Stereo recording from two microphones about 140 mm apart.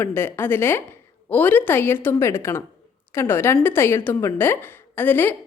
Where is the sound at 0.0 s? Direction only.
15° left (ahead or behind).